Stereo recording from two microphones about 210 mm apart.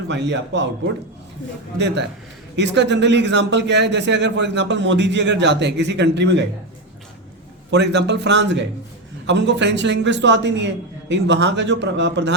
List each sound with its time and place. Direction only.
0.1 s a man's voice: 55° right (ahead or behind)
2.6 s a man's voice: 55° right (ahead or behind)
7.7 s a man's voice: 55° right (ahead or behind)